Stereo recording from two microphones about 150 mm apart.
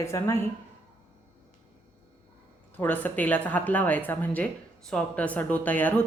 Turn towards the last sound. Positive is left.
turn(degrees=10)  # may be behind; listen again after turning